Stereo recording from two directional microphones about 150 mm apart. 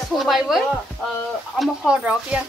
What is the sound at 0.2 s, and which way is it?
Speech, centre (ahead or behind).